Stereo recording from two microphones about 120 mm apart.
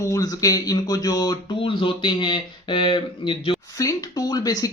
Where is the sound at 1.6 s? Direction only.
45° left (ahead or behind).